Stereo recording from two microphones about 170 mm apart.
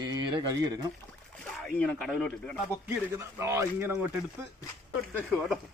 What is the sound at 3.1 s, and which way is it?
Speech, 15° right (ahead or behind).